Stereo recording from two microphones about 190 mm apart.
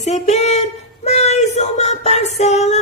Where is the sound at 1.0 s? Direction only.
35° left (ahead or behind).